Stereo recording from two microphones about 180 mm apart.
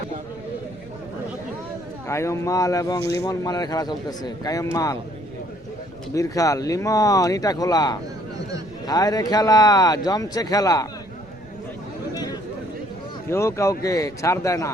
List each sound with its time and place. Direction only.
2.0 s speech: 15° left (ahead or behind)
6.1 s speech: 20° left (ahead or behind)
12.1 s chatter: 20° left (ahead or behind)
13.3 s a man's voice: 15° left (ahead or behind)